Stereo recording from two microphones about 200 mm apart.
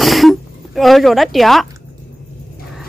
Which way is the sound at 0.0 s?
Centre (ahead or behind).